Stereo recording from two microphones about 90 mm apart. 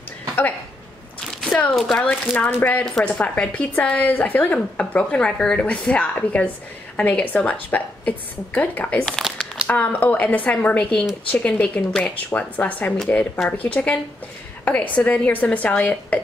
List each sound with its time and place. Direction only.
1.8 s speech: 5° left (ahead or behind)
2.0 s speech: 15° left (ahead or behind)
9.2 s crumpling: 5° right (ahead or behind)
9.7 s speech: 15° left (ahead or behind)